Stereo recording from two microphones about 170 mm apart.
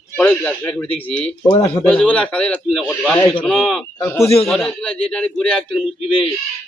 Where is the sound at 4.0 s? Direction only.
15° left (ahead or behind).